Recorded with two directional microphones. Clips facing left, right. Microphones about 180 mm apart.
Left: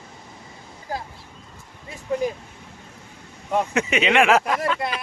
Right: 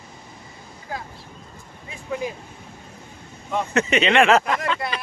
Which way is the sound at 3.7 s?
10° left (ahead or behind).